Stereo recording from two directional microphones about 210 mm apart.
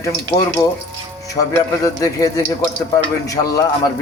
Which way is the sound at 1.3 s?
15° left (ahead or behind).